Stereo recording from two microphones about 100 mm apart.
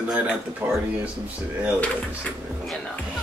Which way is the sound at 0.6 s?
15° right (ahead or behind).